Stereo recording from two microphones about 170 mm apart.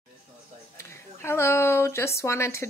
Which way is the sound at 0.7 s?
15° left (ahead or behind).